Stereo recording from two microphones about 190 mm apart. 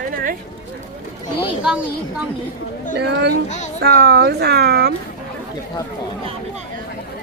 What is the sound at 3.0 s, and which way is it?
Speech, 60° right (ahead or behind).